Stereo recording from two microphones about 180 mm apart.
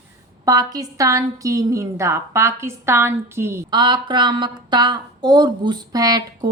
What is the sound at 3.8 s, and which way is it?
Speech, 25° right (ahead or behind).